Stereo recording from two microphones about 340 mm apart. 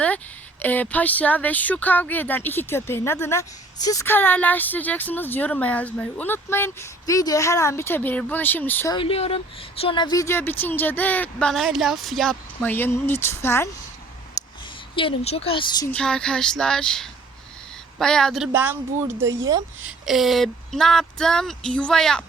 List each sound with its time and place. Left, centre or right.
0.6 s speech: centre
14.4 s a sound: centre
14.9 s speech: centre
15.9 s speech: centre